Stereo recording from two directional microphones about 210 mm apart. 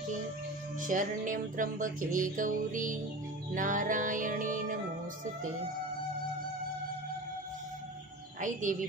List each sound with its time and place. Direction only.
0.7 s music: 40° right (ahead or behind)
8.4 s music: 40° right (ahead or behind)